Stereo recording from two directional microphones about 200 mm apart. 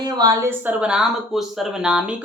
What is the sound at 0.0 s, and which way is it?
Speech, 20° right (ahead or behind).